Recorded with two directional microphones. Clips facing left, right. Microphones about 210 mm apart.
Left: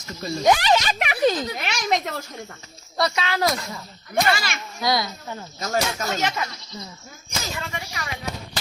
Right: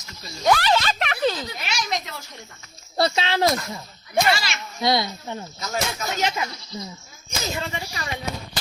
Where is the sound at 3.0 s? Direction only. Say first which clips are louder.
Right 2 dB; 30° right (ahead or behind).